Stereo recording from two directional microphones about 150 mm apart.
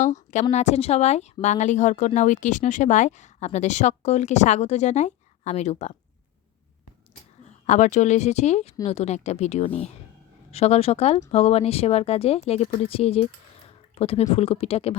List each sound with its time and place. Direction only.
0.0 s a woman's voice: 55° left (ahead or behind)
7.7 s speech: 50° left (ahead or behind)